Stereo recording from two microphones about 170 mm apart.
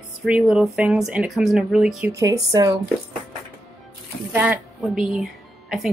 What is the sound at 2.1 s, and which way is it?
Speech, 20° right (ahead or behind).